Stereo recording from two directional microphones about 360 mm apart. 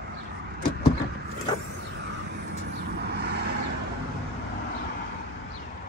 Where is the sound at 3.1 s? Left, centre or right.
Right.